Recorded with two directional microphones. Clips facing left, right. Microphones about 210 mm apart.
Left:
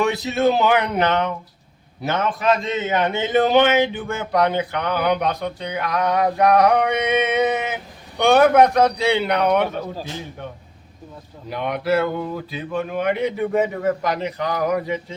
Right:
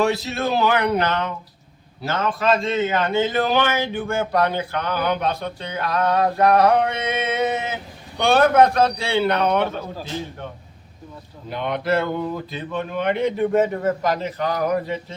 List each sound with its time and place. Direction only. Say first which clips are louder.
0.1 s a man's voice: left 4 dB; 20° left (ahead or behind)
11.5 s a man's voice: left 1 dB; 10° left (ahead or behind)